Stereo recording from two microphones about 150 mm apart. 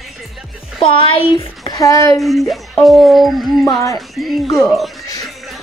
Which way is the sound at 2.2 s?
Centre (ahead or behind).